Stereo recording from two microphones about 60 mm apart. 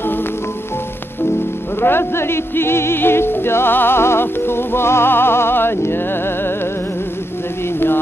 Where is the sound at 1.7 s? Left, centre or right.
Left.